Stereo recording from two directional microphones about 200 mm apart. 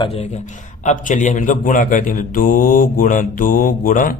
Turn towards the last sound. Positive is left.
turn(degrees=40)  # may be behind; listen again after turning